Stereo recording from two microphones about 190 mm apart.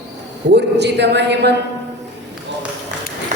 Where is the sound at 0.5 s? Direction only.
65° right (ahead or behind).